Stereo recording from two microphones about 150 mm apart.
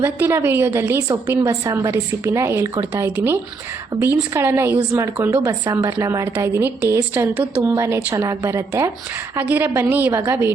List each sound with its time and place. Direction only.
0.0 s a woman's voice: 15° right (ahead or behind)